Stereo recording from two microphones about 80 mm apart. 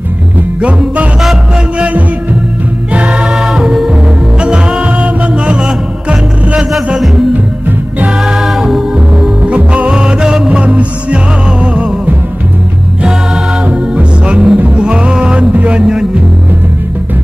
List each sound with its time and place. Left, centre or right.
0.6 s music: centre
13.7 s music: centre